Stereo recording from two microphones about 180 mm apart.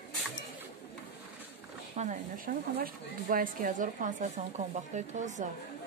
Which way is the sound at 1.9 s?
45° right (ahead or behind).